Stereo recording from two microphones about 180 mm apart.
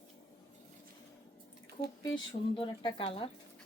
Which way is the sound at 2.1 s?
25° left (ahead or behind).